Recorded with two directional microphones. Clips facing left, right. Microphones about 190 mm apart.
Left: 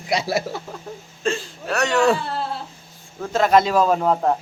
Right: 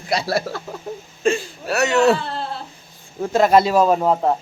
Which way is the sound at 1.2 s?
10° right (ahead or behind).